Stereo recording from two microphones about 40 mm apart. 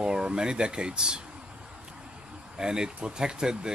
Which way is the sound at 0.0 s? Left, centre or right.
Right.